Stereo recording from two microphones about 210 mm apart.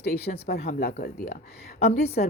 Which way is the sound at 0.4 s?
50° left (ahead or behind).